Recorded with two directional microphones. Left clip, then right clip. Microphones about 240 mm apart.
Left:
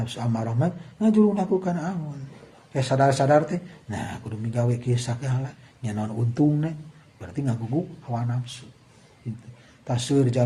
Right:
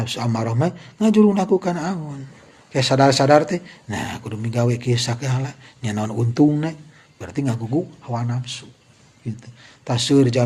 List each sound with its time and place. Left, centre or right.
0.0 s speech: right
9.8 s speech: right